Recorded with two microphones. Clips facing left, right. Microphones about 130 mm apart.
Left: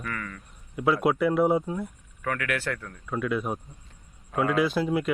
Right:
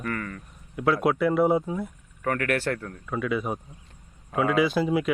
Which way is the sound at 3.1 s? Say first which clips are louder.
Even; centre (ahead or behind).